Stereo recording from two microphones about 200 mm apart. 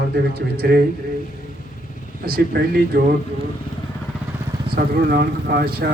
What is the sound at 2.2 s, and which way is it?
Speech, 50° right (ahead or behind).